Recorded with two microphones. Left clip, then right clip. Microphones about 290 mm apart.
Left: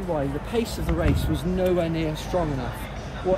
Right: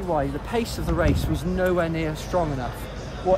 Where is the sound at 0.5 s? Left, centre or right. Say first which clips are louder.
Even; centre.